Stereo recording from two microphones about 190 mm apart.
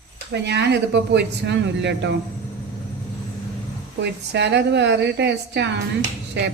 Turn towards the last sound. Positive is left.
turn(degrees=-65)  # may be behind; listen again after turning